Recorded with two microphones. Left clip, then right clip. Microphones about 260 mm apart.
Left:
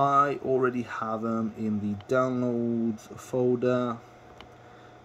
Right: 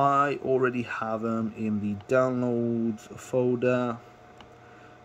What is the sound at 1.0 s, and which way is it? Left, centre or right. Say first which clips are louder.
Speech: left 1 dB; centre.